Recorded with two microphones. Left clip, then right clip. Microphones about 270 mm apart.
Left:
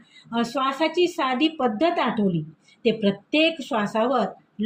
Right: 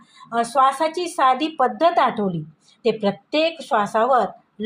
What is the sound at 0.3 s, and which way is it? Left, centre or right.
A woman's voice, right.